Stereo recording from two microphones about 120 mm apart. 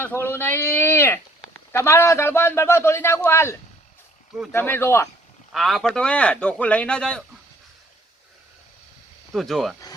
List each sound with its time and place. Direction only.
0.0 s a man's voice: 20° left (ahead or behind)
5.5 s speech: centre (ahead or behind)
9.3 s speech: centre (ahead or behind)